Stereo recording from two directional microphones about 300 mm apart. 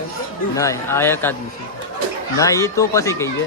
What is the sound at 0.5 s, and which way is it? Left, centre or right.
Speech, centre.